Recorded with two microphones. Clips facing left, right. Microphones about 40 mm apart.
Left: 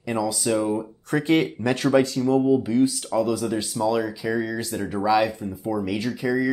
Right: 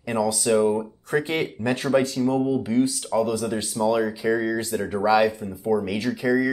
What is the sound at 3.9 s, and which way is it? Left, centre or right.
Speech, centre.